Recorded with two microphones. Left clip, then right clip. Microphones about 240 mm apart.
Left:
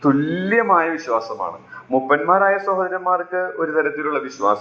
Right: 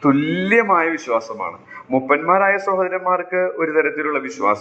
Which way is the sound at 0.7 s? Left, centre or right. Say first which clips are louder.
Even; right.